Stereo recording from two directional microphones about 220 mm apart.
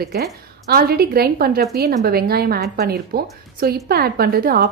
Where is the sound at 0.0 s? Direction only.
45° right (ahead or behind).